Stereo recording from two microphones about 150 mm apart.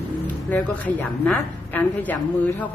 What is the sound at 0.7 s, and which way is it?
A woman's voice, 10° left (ahead or behind).